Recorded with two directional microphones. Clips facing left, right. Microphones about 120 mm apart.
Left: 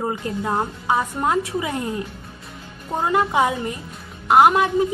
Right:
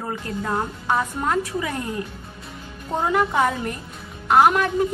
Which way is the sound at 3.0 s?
10° left (ahead or behind).